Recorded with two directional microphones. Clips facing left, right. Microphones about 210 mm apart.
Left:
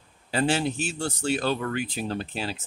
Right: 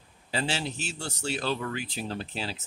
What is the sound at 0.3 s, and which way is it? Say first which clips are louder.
Speech: left 7 dB; 55° left (ahead or behind).